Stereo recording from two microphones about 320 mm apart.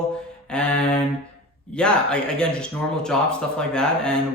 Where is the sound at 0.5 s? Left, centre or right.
Centre.